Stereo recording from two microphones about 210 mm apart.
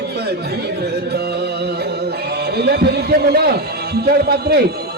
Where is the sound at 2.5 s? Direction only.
50° right (ahead or behind).